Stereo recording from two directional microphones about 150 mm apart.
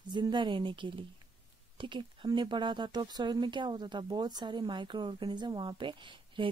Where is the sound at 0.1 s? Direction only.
30° right (ahead or behind).